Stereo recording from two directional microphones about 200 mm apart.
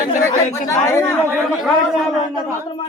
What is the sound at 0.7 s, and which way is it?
Speech, 10° left (ahead or behind).